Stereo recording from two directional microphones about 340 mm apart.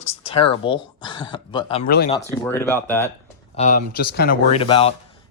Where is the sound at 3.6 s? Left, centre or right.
Left.